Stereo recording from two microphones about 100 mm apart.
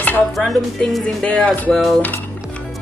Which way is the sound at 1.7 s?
5° left (ahead or behind).